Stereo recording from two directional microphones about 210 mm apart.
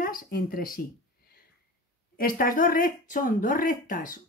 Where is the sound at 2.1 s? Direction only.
45° left (ahead or behind).